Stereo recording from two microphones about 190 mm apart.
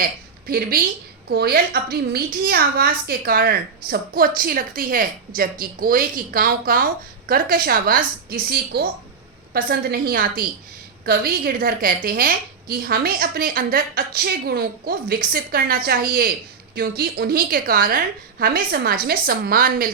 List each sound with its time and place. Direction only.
0.0 s a woman's voice: 50° right (ahead or behind)